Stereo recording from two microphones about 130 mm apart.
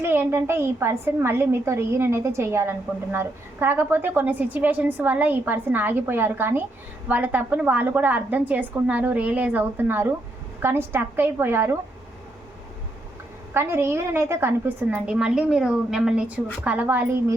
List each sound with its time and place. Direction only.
0.0 s a woman's voice: 15° right (ahead or behind)
13.5 s a woman's voice: 20° right (ahead or behind)